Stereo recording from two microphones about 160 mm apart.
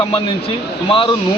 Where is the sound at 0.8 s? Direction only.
35° left (ahead or behind).